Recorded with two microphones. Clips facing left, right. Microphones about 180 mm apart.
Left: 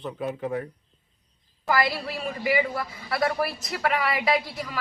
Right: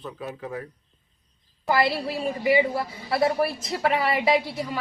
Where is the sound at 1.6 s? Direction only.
30° right (ahead or behind).